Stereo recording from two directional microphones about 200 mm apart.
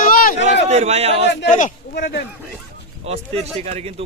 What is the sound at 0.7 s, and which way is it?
Speech, 30° right (ahead or behind).